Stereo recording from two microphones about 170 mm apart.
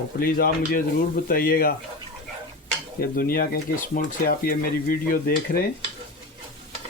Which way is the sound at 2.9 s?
60° left (ahead or behind).